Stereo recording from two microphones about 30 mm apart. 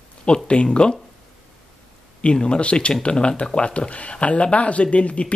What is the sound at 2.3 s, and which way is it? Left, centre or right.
Speech, left.